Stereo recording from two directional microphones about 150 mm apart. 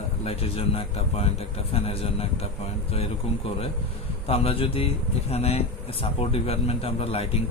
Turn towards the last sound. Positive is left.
turn(degrees=40)  # may be behind; listen again after turning